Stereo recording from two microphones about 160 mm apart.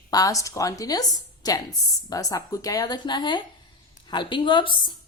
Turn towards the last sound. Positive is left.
turn(degrees=30)  # may be behind; listen again after turning